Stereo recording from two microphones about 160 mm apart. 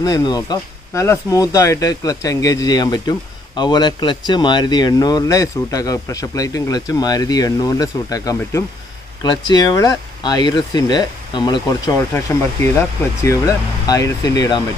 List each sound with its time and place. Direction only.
0.0 s speech: 25° left (ahead or behind)